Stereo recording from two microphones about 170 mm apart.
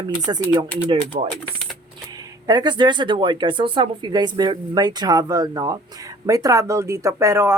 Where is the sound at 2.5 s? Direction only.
25° right (ahead or behind).